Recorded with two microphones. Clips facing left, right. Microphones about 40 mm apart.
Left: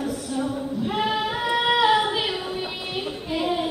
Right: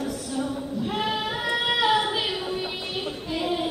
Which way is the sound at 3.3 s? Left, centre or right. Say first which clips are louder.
Left 2 dB; centre.